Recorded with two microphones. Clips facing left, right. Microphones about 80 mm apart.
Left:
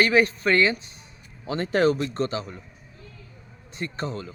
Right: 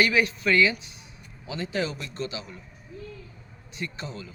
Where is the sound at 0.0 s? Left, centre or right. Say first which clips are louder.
Left 3 dB; left.